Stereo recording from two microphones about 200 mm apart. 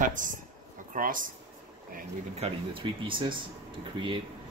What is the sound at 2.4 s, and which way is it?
Speech, 25° right (ahead or behind).